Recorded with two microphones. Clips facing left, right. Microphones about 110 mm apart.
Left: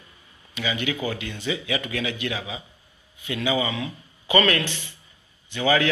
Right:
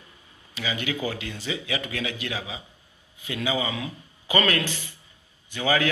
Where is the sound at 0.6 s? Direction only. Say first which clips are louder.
Left 2 dB; 35° right (ahead or behind).